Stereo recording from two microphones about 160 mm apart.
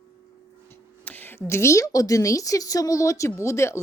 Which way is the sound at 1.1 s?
10° left (ahead or behind).